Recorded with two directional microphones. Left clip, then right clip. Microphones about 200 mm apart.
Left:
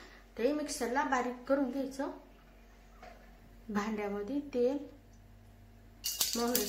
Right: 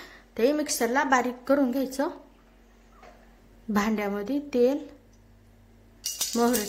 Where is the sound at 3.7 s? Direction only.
45° right (ahead or behind).